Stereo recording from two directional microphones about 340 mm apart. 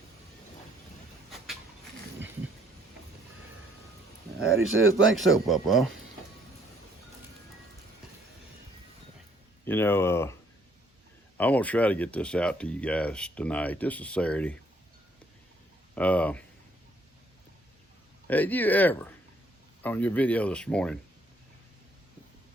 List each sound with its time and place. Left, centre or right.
4.4 s speech: right
5.1 s speech: centre
9.6 s speech: centre
11.3 s speech: centre
16.0 s speech: centre
18.3 s speech: centre